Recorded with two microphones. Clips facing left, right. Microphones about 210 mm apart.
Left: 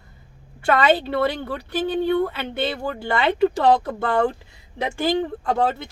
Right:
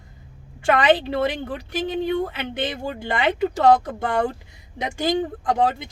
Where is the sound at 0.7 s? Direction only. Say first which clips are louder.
Even; 15° right (ahead or behind).